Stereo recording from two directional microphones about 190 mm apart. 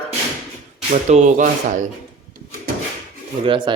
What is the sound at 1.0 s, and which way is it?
Speech, 40° right (ahead or behind).